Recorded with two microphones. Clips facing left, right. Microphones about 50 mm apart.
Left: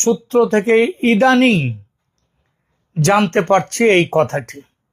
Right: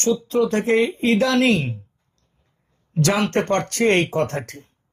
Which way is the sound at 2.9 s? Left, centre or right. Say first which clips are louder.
Left 5 dB; left.